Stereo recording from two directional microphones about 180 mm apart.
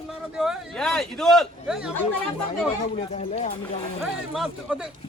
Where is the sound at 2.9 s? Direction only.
35° left (ahead or behind).